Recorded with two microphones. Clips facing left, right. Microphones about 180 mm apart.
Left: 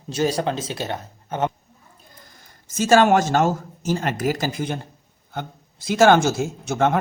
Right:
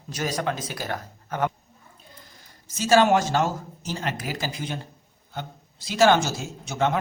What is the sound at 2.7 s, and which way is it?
Speech, 50° left (ahead or behind).